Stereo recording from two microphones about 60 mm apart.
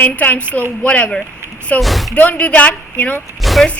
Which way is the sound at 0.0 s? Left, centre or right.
Left.